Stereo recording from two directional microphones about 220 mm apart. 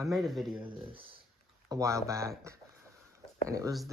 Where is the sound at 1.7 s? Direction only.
15° right (ahead or behind).